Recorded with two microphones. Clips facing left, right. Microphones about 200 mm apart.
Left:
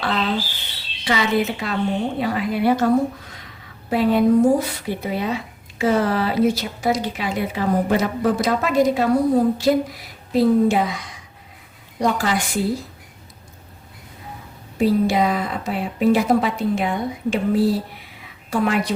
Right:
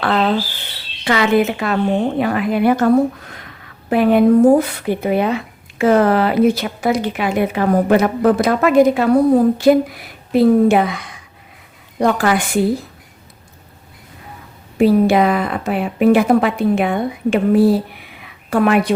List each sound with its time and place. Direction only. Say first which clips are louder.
0.0 s a sound: right 6 dB; 55° right (ahead or behind)
1.0 s a woman's voice: right 5 dB; 60° right (ahead or behind)
14.8 s a woman's voice: right 5 dB; 60° right (ahead or behind)